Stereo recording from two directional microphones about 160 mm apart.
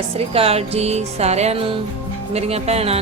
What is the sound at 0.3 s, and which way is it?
Speech, 40° right (ahead or behind).